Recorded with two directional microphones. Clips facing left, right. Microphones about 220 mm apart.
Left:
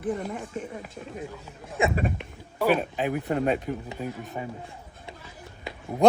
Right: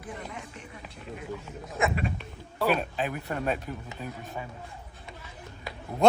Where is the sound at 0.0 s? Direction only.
50° left (ahead or behind).